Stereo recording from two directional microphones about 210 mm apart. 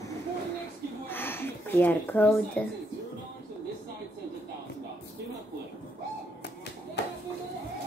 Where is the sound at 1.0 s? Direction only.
10° left (ahead or behind).